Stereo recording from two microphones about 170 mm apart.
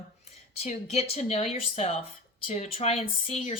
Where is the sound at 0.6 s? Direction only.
40° left (ahead or behind).